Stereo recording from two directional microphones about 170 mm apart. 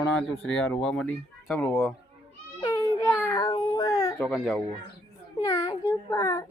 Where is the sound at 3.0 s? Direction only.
15° left (ahead or behind).